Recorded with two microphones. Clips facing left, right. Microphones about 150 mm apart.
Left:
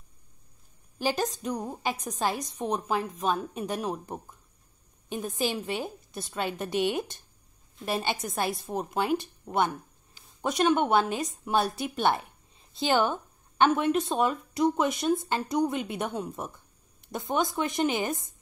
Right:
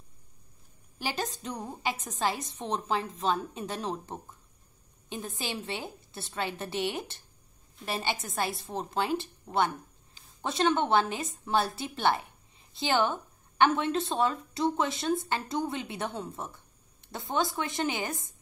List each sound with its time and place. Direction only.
1.2 s a woman's voice: 15° left (ahead or behind)
5.5 s a woman's voice: 20° right (ahead or behind)
6.1 s a woman's voice: 15° left (ahead or behind)